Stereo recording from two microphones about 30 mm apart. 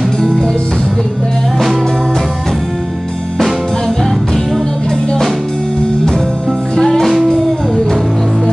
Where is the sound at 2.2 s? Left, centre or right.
Centre.